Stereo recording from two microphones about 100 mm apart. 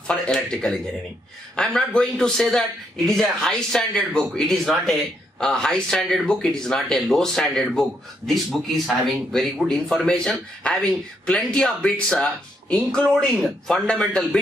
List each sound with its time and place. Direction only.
0.0 s speech: 5° left (ahead or behind)